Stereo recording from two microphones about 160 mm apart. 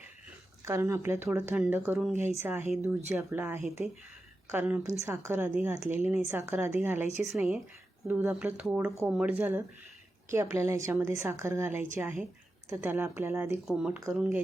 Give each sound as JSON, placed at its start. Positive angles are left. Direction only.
{"t": 0.6, "sound": "speech", "side_deg": -20}
{"t": 13.7, "sound": "speech", "side_deg": -5}